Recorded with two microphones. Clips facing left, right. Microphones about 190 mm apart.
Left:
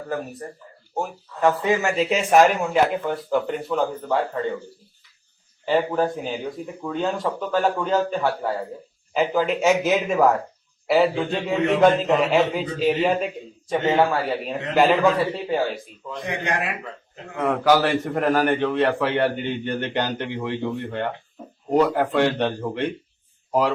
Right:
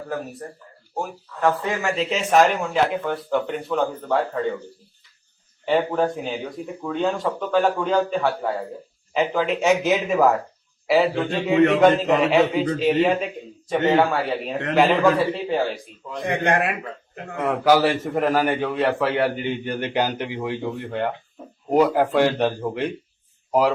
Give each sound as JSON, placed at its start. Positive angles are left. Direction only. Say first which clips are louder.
{"t": 0.9, "sound": "speech", "louder": "left 1 dB", "side_deg": 5}
{"t": 5.6, "sound": "speech", "louder": "even", "side_deg": 0}
{"t": 16.2, "sound": "speech", "louder": "right 5 dB", "side_deg": -55}
{"t": 17.4, "sound": "speech", "louder": "right 1 dB", "side_deg": -5}